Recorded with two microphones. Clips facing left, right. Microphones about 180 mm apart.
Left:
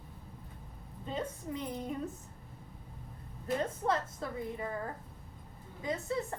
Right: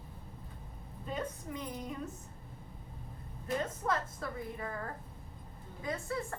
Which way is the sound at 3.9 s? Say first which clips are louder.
Left 1 dB; 25° left (ahead or behind).